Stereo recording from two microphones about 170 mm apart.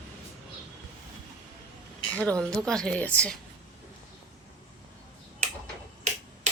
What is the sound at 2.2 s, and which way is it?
Speech, 5° left (ahead or behind).